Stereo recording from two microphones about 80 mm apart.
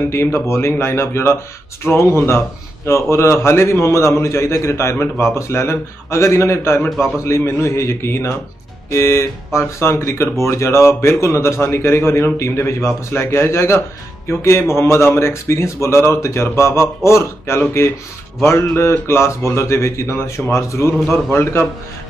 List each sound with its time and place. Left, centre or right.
0.1 s speech: left